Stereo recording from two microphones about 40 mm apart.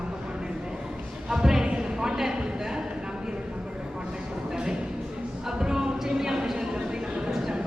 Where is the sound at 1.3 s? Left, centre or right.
Centre.